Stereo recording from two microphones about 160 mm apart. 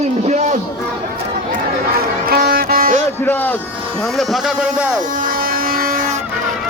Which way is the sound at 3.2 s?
10° left (ahead or behind).